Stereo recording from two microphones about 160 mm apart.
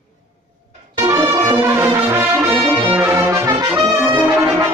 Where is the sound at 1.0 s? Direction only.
20° right (ahead or behind).